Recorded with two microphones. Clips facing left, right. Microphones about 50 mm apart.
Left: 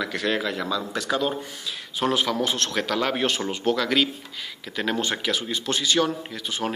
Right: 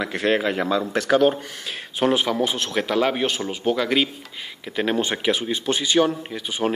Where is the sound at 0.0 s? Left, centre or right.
Right.